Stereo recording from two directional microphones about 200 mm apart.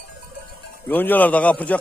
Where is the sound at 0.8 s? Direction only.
10° left (ahead or behind).